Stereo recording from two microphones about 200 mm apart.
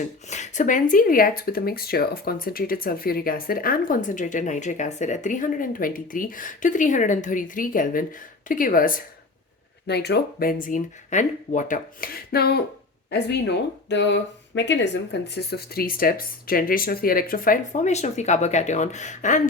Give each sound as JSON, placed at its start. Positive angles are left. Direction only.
{"t": 0.0, "sound": "speech", "side_deg": 35}
{"t": 9.8, "sound": "speech", "side_deg": 55}